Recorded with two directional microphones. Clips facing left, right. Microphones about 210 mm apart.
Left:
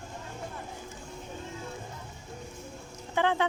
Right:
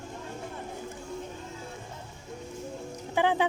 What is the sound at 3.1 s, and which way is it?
Speech, 10° right (ahead or behind).